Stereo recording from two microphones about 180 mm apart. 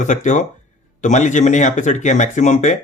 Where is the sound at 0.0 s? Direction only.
45° left (ahead or behind).